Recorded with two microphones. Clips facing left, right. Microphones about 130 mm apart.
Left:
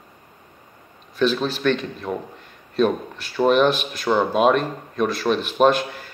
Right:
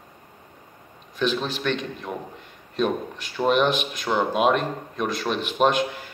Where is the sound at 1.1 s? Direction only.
15° right (ahead or behind).